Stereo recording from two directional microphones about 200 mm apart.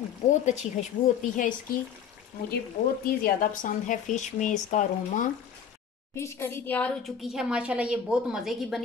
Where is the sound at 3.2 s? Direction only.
40° left (ahead or behind).